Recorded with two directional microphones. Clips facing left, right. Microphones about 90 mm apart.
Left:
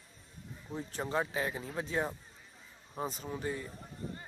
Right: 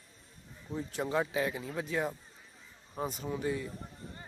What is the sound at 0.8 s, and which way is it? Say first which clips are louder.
Speech: right 2 dB; 35° left (ahead or behind).